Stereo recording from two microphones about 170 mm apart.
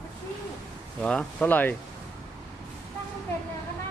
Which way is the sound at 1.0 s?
5° left (ahead or behind).